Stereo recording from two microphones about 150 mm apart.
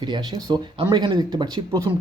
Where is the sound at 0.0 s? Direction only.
30° right (ahead or behind).